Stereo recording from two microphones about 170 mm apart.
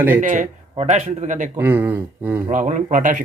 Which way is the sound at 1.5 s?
10° right (ahead or behind).